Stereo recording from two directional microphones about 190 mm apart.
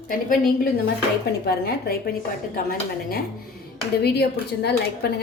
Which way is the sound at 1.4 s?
55° left (ahead or behind).